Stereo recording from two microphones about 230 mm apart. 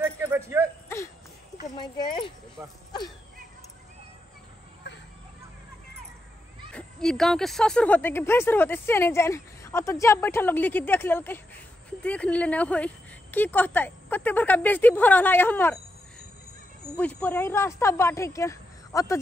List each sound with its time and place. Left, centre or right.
0.0 s a sound: centre
1.8 s speech: centre
6.7 s speech: centre
16.9 s speech: centre